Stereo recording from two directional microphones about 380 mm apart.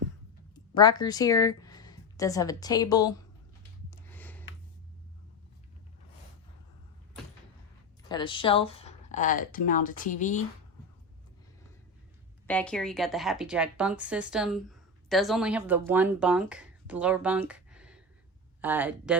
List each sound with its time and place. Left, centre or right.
0.5 s speech: centre
3.8 s a sound: centre
8.0 s speech: centre
12.5 s a woman's voice: centre